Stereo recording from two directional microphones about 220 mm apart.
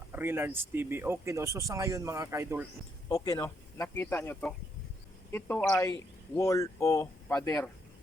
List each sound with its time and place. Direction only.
0.1 s speech: 10° right (ahead or behind)
3.2 s speech: 15° left (ahead or behind)
5.5 s speech: 5° left (ahead or behind)
5.9 s speech: 15° left (ahead or behind)